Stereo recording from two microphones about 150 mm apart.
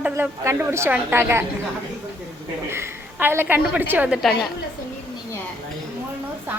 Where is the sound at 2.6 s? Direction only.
15° right (ahead or behind).